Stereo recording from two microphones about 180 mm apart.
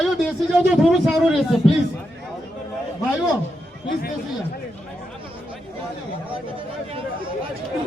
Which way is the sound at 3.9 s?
55° left (ahead or behind).